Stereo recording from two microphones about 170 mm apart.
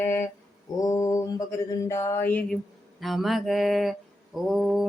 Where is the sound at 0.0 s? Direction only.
15° left (ahead or behind).